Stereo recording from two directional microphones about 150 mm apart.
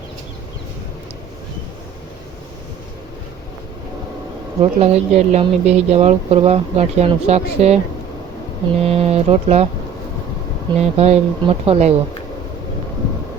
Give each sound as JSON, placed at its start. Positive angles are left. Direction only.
{"t": 4.6, "sound": "speech", "side_deg": -45}
{"t": 8.8, "sound": "speech", "side_deg": -45}
{"t": 10.8, "sound": "speech", "side_deg": -45}